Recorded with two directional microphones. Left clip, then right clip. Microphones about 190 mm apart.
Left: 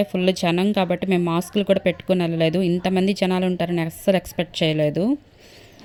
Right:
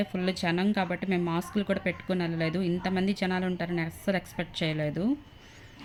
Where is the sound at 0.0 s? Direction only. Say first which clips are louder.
Left 10 dB; 40° left (ahead or behind).